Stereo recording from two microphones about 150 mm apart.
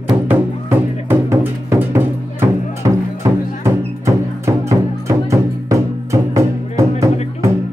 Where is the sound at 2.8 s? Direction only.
25° right (ahead or behind).